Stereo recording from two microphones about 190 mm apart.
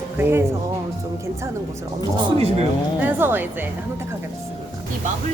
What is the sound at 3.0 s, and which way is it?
Speech, 10° right (ahead or behind).